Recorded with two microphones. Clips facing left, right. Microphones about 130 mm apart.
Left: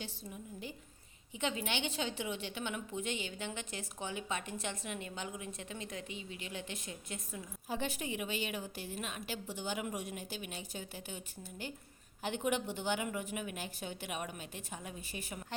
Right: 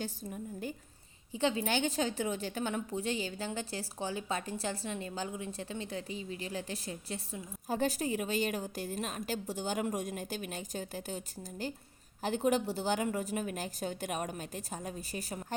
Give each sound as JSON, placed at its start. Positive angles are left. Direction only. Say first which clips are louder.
{"t": 0.0, "sound": "a woman's voice", "louder": "right 6 dB", "side_deg": -45}
{"t": 1.3, "sound": "a woman's voice", "louder": "right 6 dB", "side_deg": -30}
{"t": 12.2, "sound": "a woman's voice", "louder": "right 5 dB", "side_deg": -35}